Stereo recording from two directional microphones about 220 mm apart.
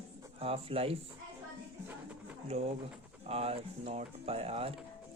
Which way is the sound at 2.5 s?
25° right (ahead or behind).